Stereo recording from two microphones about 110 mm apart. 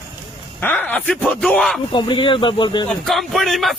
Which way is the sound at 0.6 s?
15° left (ahead or behind).